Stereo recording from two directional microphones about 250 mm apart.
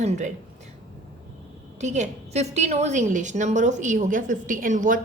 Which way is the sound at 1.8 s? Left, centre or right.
Right.